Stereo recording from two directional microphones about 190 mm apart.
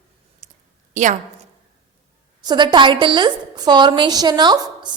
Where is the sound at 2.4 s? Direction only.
25° right (ahead or behind).